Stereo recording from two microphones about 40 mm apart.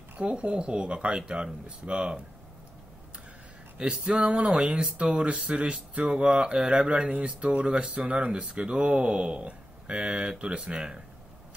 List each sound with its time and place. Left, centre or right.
0.2 s speech: right
4.1 s a sound: right
4.5 s speech: right
6.0 s speech: right
7.5 s a sound: right
7.9 s speech: right